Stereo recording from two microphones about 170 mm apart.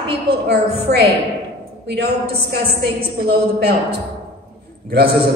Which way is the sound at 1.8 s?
70° right (ahead or behind).